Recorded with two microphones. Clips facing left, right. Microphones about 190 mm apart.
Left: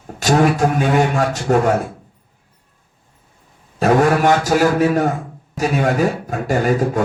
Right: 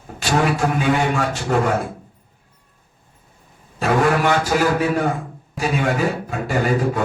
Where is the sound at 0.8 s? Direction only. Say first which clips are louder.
Left 3 dB; 40° left (ahead or behind).